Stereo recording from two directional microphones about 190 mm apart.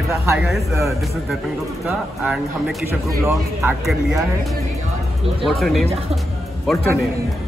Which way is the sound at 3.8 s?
Centre (ahead or behind).